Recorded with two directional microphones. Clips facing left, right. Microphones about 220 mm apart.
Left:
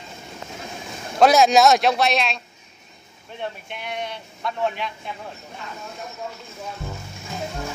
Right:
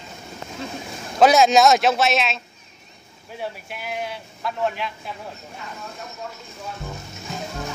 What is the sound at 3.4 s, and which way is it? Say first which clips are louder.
A man's voice: even; 5° right (ahead or behind).